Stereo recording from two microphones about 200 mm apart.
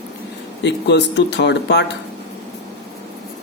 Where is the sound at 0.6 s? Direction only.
60° left (ahead or behind).